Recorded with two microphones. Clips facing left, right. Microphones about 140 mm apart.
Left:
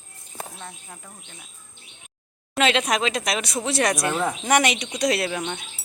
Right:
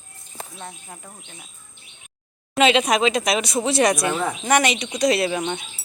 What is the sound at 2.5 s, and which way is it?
Speech, 5° right (ahead or behind).